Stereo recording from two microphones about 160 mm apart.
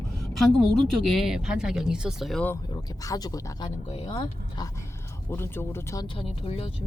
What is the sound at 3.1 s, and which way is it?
Speech, 25° left (ahead or behind).